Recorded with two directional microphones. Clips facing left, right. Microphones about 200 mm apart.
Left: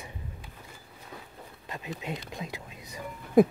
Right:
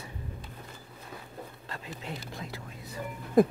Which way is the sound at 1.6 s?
15° left (ahead or behind).